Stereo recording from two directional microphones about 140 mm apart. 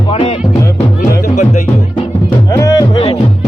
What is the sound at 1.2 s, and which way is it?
Music, 60° left (ahead or behind).